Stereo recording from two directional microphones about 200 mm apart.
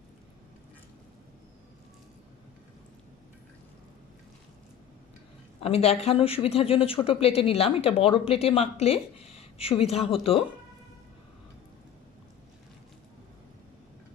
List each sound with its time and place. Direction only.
5.6 s speech: 30° left (ahead or behind)